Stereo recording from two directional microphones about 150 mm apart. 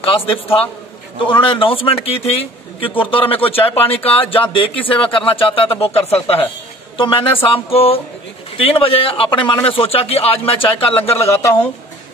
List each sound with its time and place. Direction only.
0.0 s a man's voice: 40° left (ahead or behind)